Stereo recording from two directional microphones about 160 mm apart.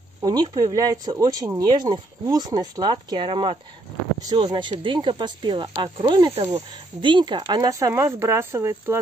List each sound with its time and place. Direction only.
0.2 s speech: 25° right (ahead or behind)